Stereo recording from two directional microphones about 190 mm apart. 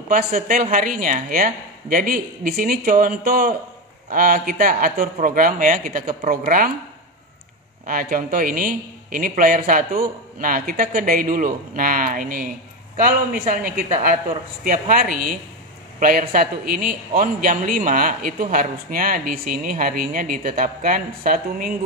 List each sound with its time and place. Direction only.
0.1 s a man's voice: 45° right (ahead or behind)
7.8 s a man's voice: 50° right (ahead or behind)